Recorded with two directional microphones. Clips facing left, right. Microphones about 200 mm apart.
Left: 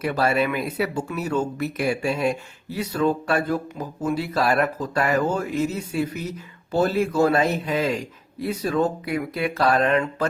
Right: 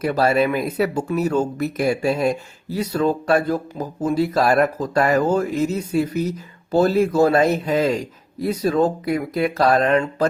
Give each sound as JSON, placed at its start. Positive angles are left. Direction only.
{"t": 0.0, "sound": "speech", "side_deg": -40}